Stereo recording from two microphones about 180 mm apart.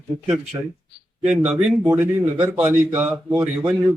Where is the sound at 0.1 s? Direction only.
40° right (ahead or behind).